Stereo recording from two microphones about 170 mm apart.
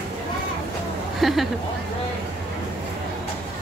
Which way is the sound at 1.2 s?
Centre (ahead or behind).